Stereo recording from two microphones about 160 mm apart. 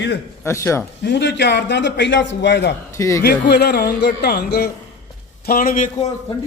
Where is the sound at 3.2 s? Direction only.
90° left.